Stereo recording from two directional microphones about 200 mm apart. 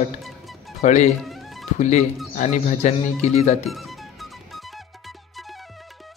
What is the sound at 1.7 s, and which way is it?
Speech, 35° left (ahead or behind).